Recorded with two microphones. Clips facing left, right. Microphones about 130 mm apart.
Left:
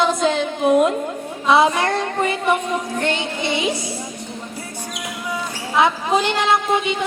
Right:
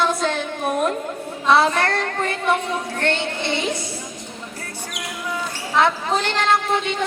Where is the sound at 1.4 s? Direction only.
15° left (ahead or behind).